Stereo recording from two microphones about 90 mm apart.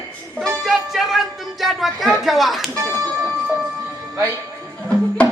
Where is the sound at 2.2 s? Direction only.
Centre (ahead or behind).